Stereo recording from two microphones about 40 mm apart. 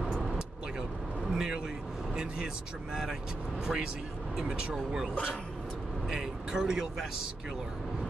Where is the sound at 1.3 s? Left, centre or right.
Centre.